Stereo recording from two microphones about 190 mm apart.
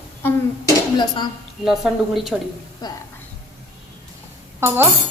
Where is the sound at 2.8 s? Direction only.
20° left (ahead or behind).